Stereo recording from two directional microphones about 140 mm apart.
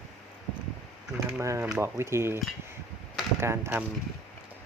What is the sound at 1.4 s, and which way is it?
Speech, 20° right (ahead or behind).